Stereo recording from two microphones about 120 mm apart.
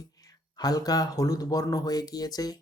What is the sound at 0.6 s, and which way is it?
Speech, 30° left (ahead or behind).